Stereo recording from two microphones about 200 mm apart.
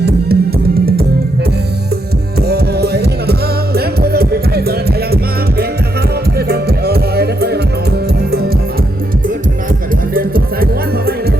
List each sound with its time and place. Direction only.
0.0 s music: 50° right (ahead or behind)
2.5 s music: 55° right (ahead or behind)
10.2 s music: 50° right (ahead or behind)